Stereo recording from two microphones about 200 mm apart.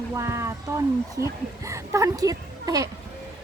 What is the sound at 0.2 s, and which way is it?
Speech, 15° right (ahead or behind).